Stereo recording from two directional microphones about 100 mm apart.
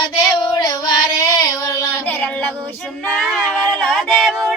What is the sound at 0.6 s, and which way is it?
Child singing, 40° left (ahead or behind).